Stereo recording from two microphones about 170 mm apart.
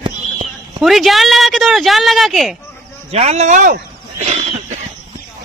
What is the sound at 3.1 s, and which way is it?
Speech, 40° right (ahead or behind).